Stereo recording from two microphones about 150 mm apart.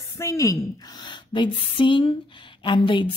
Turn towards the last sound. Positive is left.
turn(degrees=35)  # may be behind; listen again after turning